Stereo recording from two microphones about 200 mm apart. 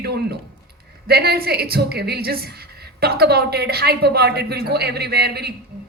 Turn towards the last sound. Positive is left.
turn(degrees=-55)  # may be behind; listen again after turning